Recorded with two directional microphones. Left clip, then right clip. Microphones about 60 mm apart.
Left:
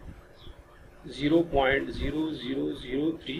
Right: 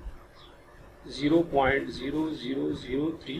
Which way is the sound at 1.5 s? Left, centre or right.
Centre.